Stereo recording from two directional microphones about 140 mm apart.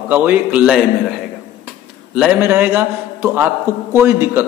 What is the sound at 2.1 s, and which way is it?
Speech, 5° right (ahead or behind).